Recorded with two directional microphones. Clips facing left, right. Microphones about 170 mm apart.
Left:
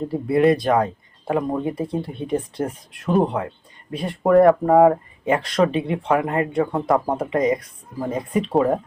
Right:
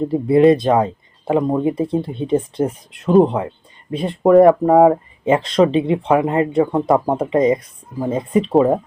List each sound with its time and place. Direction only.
0.3 s speech: 25° right (ahead or behind)